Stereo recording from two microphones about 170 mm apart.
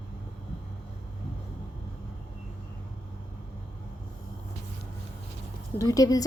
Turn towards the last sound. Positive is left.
turn(degrees=20)  # may be behind; listen again after turning